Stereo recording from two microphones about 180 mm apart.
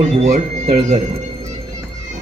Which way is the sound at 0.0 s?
40° right (ahead or behind).